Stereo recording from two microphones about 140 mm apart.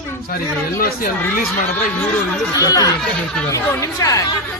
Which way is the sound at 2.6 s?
25° left (ahead or behind).